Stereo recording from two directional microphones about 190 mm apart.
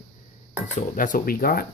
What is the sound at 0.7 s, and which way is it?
Speech, 45° left (ahead or behind).